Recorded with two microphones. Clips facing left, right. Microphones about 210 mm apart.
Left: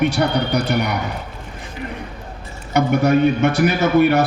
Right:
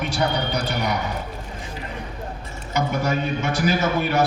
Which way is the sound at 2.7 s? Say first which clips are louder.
Left 8 dB; 60° left (ahead or behind).